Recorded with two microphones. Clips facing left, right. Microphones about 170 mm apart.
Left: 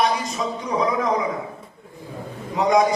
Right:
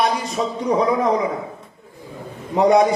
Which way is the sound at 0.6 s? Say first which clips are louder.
Right 5 dB; 30° right (ahead or behind).